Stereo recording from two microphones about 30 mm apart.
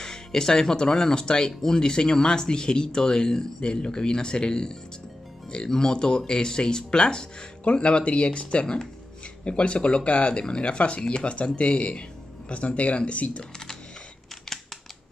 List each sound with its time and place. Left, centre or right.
0.0 s speech: centre
3.6 s speech: left
7.6 s speech: left
10.5 s speech: left